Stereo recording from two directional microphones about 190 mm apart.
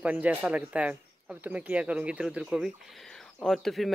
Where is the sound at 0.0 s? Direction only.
5° right (ahead or behind).